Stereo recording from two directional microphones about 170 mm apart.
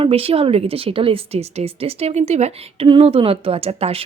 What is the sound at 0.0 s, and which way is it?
A woman's voice, 35° right (ahead or behind).